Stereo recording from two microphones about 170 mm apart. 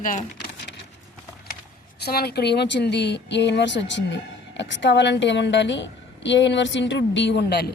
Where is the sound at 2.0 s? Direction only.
70° left (ahead or behind).